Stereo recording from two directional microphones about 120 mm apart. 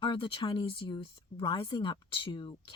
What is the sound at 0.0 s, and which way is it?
Speech, 45° left (ahead or behind).